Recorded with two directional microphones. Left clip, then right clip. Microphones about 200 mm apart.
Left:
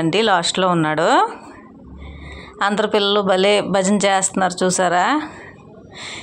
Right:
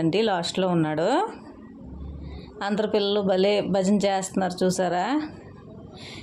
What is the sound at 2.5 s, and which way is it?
Speech, centre (ahead or behind).